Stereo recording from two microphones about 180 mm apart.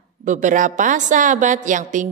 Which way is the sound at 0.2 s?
45° right (ahead or behind).